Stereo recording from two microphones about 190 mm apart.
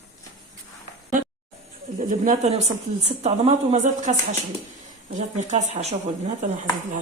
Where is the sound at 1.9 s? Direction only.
40° right (ahead or behind).